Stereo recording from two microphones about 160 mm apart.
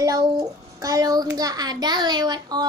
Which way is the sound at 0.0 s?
25° right (ahead or behind).